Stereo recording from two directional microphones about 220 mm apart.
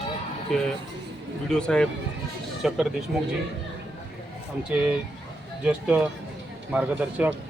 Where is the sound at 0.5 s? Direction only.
Centre (ahead or behind).